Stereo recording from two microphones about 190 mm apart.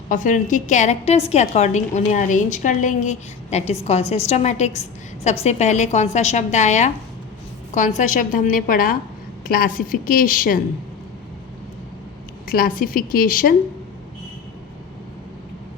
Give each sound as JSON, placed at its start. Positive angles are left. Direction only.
{"t": 0.1, "sound": "a woman's voice", "side_deg": 40}
{"t": 12.5, "sound": "a woman's voice", "side_deg": 50}